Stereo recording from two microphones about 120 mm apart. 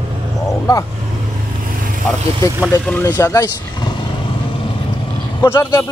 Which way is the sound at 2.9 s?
20° left (ahead or behind).